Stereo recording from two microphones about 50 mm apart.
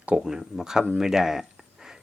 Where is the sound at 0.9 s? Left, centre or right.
Centre.